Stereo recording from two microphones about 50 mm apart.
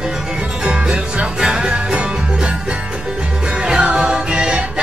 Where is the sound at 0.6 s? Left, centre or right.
Right.